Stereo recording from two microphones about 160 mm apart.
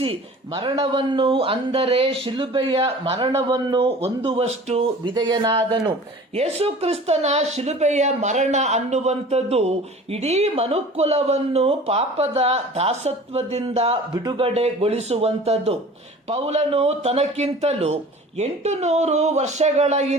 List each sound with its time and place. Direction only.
0.0 s a woman's voice: 35° right (ahead or behind)
5.1 s speech: 25° right (ahead or behind)
6.3 s a woman's voice: 40° right (ahead or behind)